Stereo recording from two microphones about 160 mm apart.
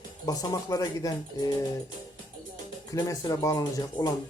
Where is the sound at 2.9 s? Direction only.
25° left (ahead or behind).